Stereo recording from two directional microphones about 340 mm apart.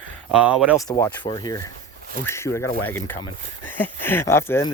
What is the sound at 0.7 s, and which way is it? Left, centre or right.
Speech, centre.